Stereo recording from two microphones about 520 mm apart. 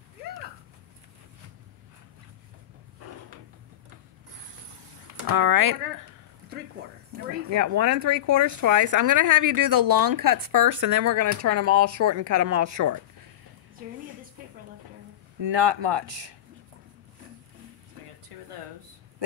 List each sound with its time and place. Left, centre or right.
5.3 s speech: right
7.4 s speech: right
15.4 s speech: right